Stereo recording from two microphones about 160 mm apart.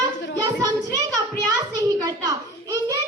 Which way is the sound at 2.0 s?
25° right (ahead or behind).